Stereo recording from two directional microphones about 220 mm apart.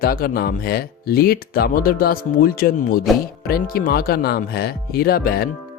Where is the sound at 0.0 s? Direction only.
45° left (ahead or behind).